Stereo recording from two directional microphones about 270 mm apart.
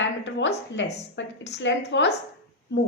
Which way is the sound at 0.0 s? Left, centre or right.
Left.